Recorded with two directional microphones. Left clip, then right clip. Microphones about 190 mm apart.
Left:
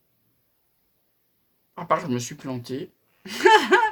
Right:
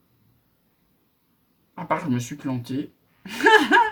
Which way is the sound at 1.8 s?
45° left (ahead or behind).